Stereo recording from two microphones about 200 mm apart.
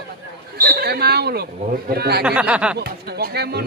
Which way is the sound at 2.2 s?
5° right (ahead or behind).